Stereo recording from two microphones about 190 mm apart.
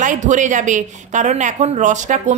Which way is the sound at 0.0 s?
40° right (ahead or behind).